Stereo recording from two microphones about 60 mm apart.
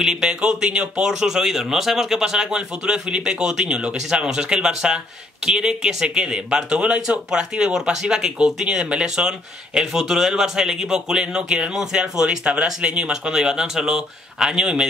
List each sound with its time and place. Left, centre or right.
0.0 s speech: centre